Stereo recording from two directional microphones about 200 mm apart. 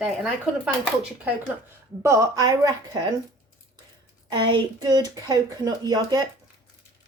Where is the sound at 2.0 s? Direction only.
15° right (ahead or behind).